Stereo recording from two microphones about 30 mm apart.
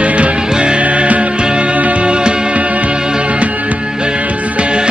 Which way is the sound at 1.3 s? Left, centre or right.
Right.